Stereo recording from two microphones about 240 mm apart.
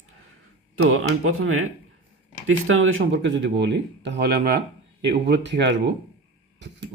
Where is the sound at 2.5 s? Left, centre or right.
Right.